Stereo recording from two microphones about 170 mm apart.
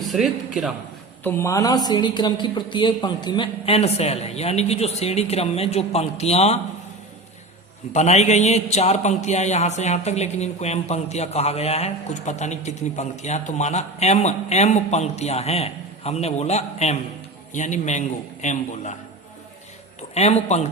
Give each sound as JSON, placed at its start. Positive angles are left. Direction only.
{"t": 0.0, "sound": "a man's voice", "side_deg": 0}
{"t": 1.2, "sound": "a man's voice", "side_deg": 15}
{"t": 7.9, "sound": "a man's voice", "side_deg": 40}
{"t": 20.1, "sound": "a man's voice", "side_deg": 40}